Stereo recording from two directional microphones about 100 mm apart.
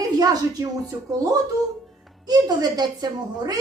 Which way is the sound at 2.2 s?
40° right (ahead or behind).